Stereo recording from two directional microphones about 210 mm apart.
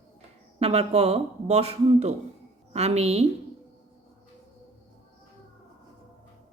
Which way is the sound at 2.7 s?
30° right (ahead or behind).